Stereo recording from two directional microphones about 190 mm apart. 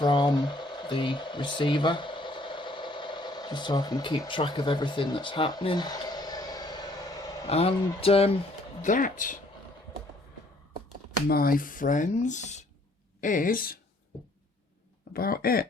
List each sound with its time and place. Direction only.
0.0 s a sound: 25° left (ahead or behind)
7.4 s a man's voice: 30° left (ahead or behind)
8.8 s speech: 45° left (ahead or behind)
11.3 s speech: 50° left (ahead or behind)
15.1 s speech: 50° left (ahead or behind)